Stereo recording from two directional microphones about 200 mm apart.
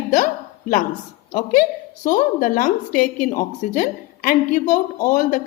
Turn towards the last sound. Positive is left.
turn(degrees=40)  # may be behind; listen again after turning